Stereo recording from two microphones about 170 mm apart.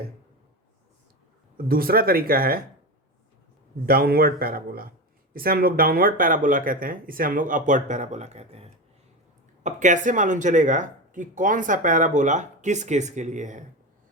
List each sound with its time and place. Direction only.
1.5 s speech: 60° right (ahead or behind)
3.8 s speech: 60° right (ahead or behind); by 13.7 s 45° right (ahead or behind)